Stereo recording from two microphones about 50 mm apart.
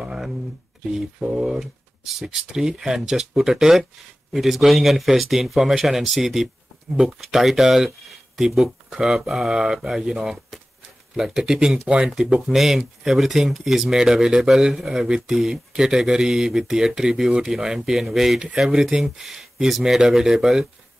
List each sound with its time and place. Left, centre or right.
0.0 s a sound: centre
0.9 s a man's voice: centre
12.4 s speech: centre